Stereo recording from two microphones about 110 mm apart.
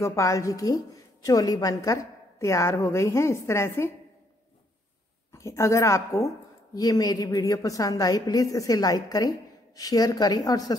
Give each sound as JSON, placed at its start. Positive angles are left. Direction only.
{"t": 0.0, "sound": "a woman's voice", "side_deg": 25}
{"t": 5.3, "sound": "a woman's voice", "side_deg": 25}